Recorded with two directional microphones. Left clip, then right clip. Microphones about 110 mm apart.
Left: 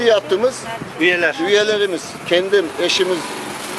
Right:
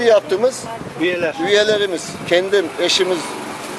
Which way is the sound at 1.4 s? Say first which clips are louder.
Right 5 dB; 5° right (ahead or behind).